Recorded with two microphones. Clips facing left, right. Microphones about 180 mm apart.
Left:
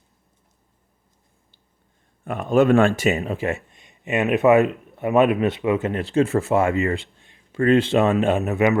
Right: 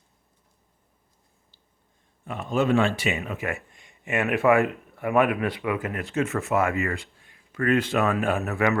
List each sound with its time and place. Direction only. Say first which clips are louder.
2.2 s a man's voice: left 7 dB; 55° left (ahead or behind); by 8.8 s 20° left (ahead or behind)